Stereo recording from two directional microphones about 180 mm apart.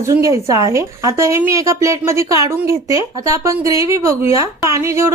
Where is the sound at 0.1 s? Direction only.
15° right (ahead or behind).